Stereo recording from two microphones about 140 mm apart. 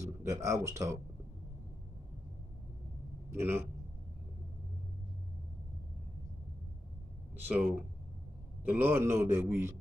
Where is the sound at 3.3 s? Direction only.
15° right (ahead or behind).